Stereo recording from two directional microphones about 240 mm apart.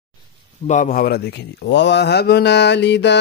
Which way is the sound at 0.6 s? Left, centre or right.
Left.